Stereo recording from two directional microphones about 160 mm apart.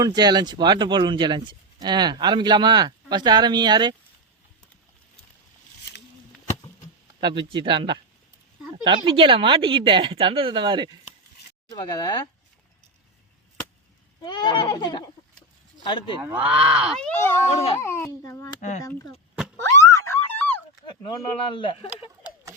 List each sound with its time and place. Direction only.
0.0 s speech: 25° right (ahead or behind)
7.2 s speech: 30° right (ahead or behind)
11.7 s speech: 25° left (ahead or behind)
14.2 s speech: 25° left (ahead or behind)
16.2 s speech: 10° right (ahead or behind)
17.0 s a child's voice: 10° left (ahead or behind)
17.5 s speech: 40° left (ahead or behind)
17.8 s a child's voice: 15° left (ahead or behind)
19.5 s a sound: 20° left (ahead or behind)
21.2 s speech: 35° left (ahead or behind)